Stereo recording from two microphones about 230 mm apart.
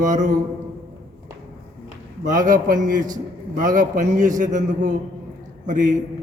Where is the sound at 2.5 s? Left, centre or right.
Right.